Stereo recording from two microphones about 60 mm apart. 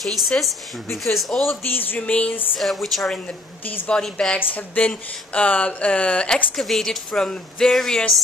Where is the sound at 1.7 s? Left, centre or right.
Left.